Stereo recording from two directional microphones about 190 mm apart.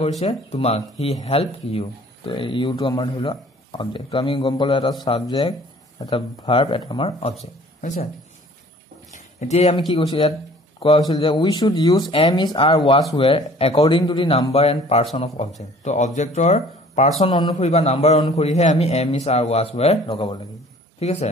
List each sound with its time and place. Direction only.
0.5 s speech: 35° left (ahead or behind)
9.1 s a man's voice: 40° left (ahead or behind)
17.2 s speech: 25° left (ahead or behind)
17.6 s a man's voice: 35° left (ahead or behind)